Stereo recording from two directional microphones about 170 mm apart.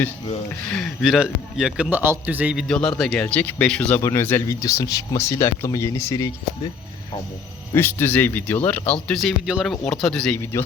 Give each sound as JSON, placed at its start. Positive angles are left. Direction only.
{"t": 0.7, "sound": "a man's voice", "side_deg": 0}
{"t": 2.6, "sound": "a man's voice", "side_deg": 5}
{"t": 7.7, "sound": "a man's voice", "side_deg": 15}